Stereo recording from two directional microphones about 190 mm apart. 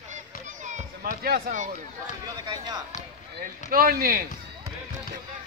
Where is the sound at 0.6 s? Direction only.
45° right (ahead or behind).